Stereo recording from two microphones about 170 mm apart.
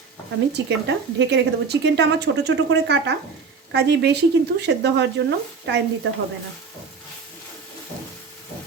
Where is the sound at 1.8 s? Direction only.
90° right.